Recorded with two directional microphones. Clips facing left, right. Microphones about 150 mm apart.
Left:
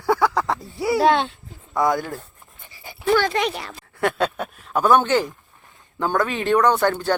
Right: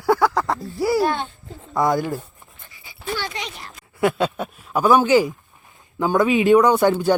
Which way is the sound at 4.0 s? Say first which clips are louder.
Right 2 dB; 5° right (ahead or behind).